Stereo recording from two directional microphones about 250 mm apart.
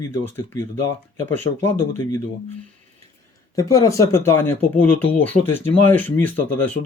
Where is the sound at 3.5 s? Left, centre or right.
Centre.